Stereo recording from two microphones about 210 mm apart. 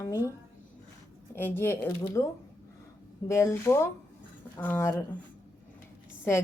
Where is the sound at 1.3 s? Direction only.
10° left (ahead or behind).